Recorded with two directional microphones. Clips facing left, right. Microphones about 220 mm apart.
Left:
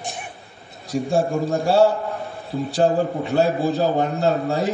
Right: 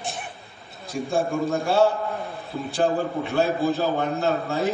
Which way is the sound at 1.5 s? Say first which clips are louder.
Left 4 dB; 35° left (ahead or behind).